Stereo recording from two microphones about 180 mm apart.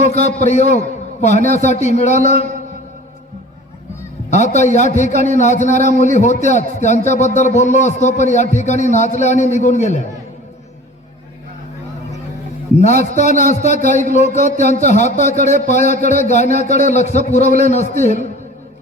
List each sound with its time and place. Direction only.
0.0 s a man's voice: 40° left (ahead or behind)
4.3 s a man's voice: 40° left (ahead or behind)
12.8 s a man's voice: 40° left (ahead or behind)